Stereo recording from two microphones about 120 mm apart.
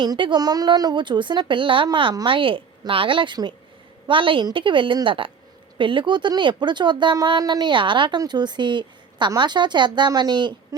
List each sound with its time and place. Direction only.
0.0 s a woman's voice: 40° right (ahead or behind)